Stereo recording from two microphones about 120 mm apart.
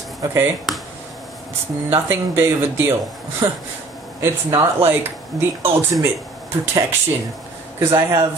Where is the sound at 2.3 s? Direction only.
20° right (ahead or behind).